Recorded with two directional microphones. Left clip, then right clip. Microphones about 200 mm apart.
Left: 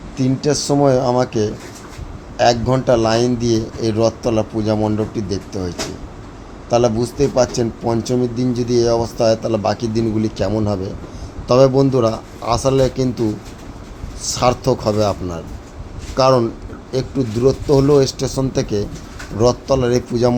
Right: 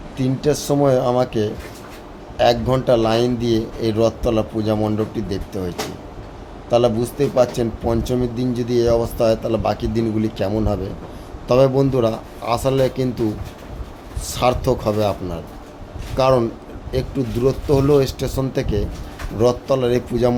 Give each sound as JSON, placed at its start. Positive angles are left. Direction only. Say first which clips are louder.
{"t": 0.2, "sound": "speech", "louder": "left 2 dB", "side_deg": 15}
{"t": 14.3, "sound": "speech", "louder": "left 2 dB", "side_deg": 15}